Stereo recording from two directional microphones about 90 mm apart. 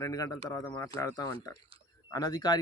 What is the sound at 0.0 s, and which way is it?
Speech, 45° left (ahead or behind).